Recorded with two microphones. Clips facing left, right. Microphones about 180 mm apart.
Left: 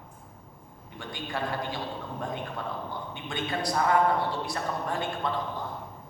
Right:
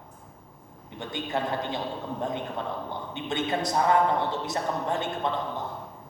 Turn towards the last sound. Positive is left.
turn(degrees=-20)  # may be behind; listen again after turning